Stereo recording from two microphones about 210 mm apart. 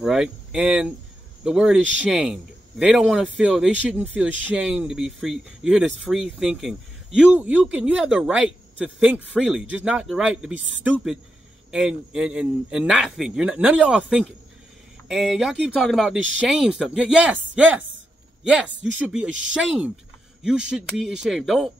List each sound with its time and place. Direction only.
0.0 s speech: centre (ahead or behind)
1.8 s speech: 60° right (ahead or behind)
2.0 s speech: centre (ahead or behind)
19.2 s speech: 60° right (ahead or behind)
20.7 s speech: 5° right (ahead or behind)